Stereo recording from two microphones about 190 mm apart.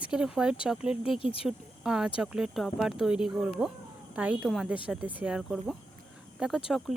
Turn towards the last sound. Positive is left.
turn(degrees=0)  # may be behind; listen again after turning